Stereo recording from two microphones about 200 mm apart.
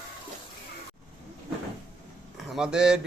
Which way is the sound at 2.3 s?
Centre (ahead or behind).